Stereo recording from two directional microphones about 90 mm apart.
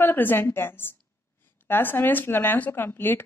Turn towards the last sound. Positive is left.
turn(degrees=25)  # may be behind; listen again after turning